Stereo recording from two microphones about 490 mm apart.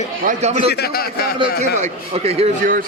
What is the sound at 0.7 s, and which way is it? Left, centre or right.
Speech, centre.